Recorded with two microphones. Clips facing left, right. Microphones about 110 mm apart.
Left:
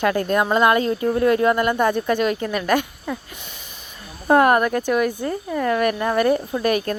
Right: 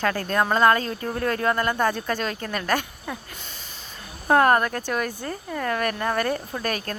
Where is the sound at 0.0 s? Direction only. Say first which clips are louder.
Left 4 dB; 20° left (ahead or behind).